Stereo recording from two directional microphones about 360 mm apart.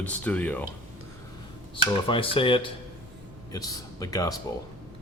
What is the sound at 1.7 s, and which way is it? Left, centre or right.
Speech, centre.